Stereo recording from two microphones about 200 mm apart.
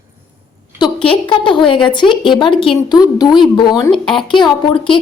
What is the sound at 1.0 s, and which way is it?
A woman's voice, 25° left (ahead or behind).